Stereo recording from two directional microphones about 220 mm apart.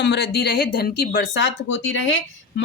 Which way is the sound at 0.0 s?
50° left (ahead or behind).